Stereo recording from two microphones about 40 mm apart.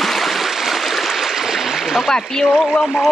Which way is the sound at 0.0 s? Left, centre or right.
Centre.